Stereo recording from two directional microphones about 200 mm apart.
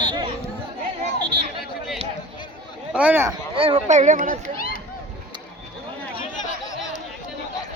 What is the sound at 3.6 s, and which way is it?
Speech, 30° right (ahead or behind).